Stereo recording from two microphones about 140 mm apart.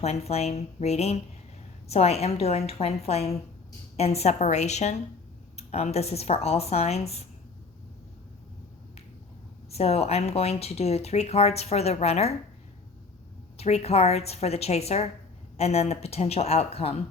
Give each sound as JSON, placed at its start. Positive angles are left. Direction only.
{"t": 0.0, "sound": "speech", "side_deg": 50}
{"t": 9.6, "sound": "speech", "side_deg": 45}
{"t": 13.6, "sound": "speech", "side_deg": 50}